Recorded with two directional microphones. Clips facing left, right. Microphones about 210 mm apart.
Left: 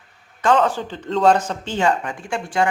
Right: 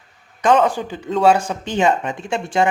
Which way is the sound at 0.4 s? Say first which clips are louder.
Right 2 dB; 15° right (ahead or behind).